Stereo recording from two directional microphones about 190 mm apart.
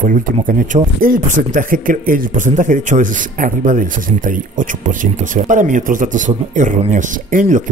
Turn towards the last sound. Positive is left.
turn(degrees=-40)  # may be behind; listen again after turning